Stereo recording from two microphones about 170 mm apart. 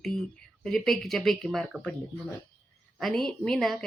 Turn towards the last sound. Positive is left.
turn(degrees=0)  # may be behind; listen again after turning